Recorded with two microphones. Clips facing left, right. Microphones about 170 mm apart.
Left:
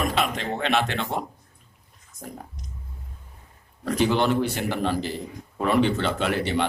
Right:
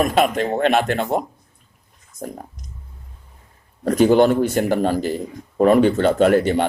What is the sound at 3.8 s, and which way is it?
Speech, 45° right (ahead or behind).